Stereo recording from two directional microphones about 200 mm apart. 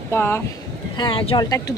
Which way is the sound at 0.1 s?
10° left (ahead or behind).